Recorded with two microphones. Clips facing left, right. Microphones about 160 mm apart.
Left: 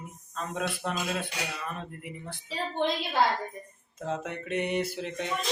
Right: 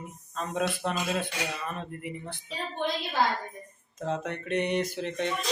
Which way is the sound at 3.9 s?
10° left (ahead or behind).